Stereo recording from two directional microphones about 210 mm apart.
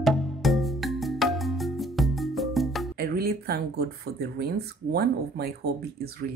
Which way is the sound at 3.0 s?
45° right (ahead or behind).